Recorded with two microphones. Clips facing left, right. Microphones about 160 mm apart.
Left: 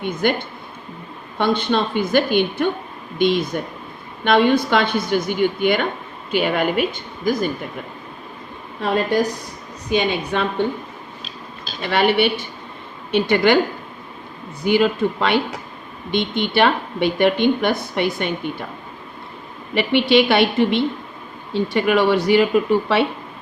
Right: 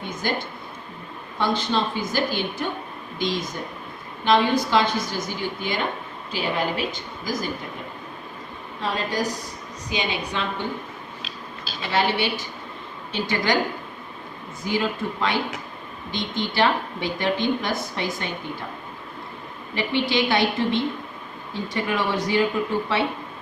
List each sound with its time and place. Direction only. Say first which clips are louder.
0.0 s speech: left 7 dB; 65° left (ahead or behind)
8.8 s speech: left 7 dB; 60° left (ahead or behind)
11.8 s speech: left 6 dB; 65° left (ahead or behind)
14.6 s speech: left 8 dB; 70° left (ahead or behind)
19.7 s speech: left 8 dB; 70° left (ahead or behind)